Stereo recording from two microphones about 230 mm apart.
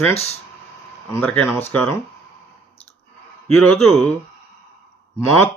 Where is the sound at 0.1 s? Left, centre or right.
Left.